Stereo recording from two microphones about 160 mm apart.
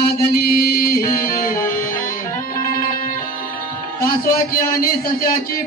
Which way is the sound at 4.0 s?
65° left (ahead or behind).